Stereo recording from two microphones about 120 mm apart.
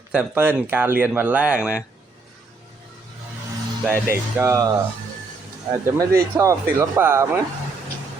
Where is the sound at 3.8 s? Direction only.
20° right (ahead or behind).